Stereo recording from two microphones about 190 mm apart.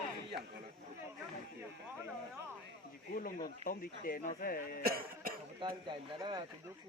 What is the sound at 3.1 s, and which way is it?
Speech, 45° left (ahead or behind).